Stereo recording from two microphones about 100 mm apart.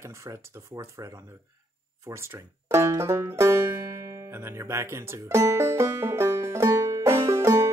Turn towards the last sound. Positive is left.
turn(degrees=-30)  # may be behind; listen again after turning